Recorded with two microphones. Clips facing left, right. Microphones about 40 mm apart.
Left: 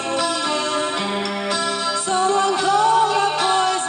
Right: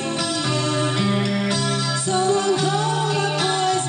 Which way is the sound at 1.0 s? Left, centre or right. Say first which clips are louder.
Right 1 dB; left.